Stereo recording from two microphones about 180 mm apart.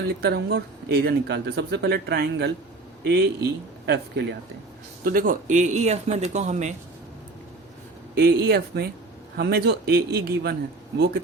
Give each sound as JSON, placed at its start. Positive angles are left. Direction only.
{"t": 0.1, "sound": "speech", "side_deg": -65}
{"t": 5.0, "sound": "speech", "side_deg": -50}
{"t": 8.1, "sound": "speech", "side_deg": -55}